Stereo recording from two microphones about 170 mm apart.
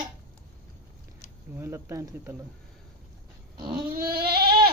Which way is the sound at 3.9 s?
60° right (ahead or behind).